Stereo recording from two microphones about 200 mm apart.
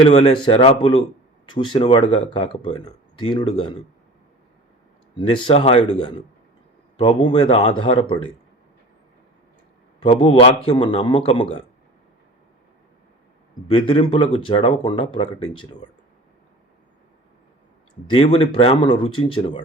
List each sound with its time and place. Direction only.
0.1 s speech: 30° left (ahead or behind)
5.1 s speech: 25° left (ahead or behind)
10.0 s speech: 25° left (ahead or behind)
13.7 s speech: 25° left (ahead or behind)
18.1 s speech: 25° left (ahead or behind)